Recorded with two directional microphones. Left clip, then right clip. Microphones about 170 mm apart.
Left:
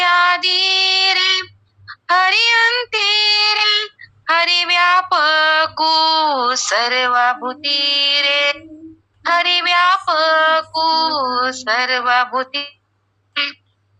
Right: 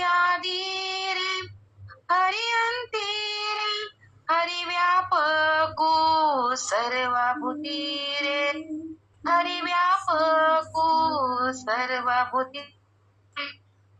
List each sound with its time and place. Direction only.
0.0 s female singing: 25° left (ahead or behind)
2.0 s child singing: 25° left (ahead or behind)